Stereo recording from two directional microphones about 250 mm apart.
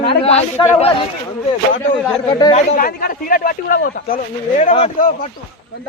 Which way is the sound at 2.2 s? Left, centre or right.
Left.